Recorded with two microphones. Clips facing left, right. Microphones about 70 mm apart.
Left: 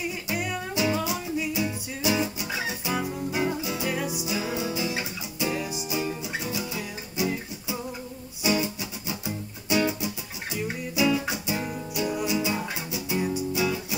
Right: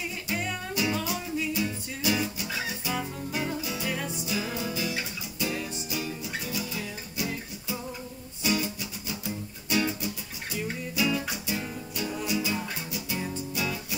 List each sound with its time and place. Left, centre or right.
0.3 s music: centre
9.2 s music: centre